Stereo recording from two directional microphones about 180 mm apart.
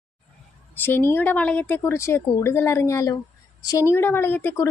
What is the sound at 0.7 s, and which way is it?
Speech, 10° left (ahead or behind).